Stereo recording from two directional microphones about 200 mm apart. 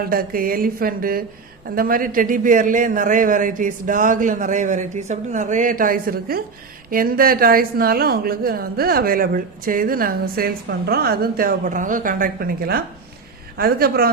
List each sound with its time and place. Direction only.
0.1 s a man's voice: 45° right (ahead or behind)